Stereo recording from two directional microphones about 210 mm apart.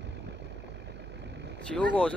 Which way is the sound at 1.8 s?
5° left (ahead or behind).